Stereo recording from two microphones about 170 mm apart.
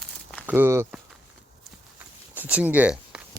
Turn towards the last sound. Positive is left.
turn(degrees=-10)  # may be behind; listen again after turning